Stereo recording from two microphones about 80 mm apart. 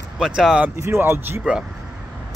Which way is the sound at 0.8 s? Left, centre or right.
Right.